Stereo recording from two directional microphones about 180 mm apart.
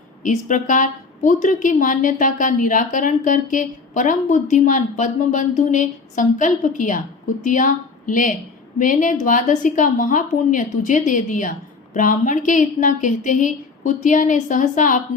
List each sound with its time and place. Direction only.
0.2 s a woman's voice: 45° left (ahead or behind)